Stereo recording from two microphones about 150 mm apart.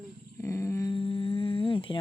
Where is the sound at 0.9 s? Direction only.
35° left (ahead or behind).